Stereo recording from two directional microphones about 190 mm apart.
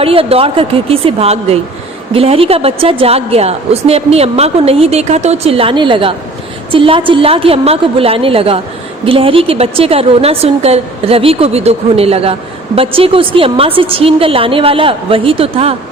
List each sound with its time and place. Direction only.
0.0 s a woman's voice: 30° right (ahead or behind)